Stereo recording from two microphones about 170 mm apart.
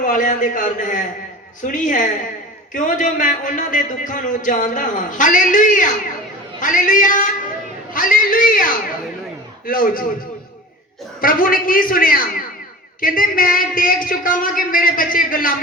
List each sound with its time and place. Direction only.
0.0 s speech: 50° left (ahead or behind)
11.2 s speech: 55° left (ahead or behind)